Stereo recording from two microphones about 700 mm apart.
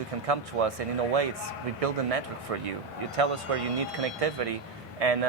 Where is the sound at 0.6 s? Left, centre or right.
Right.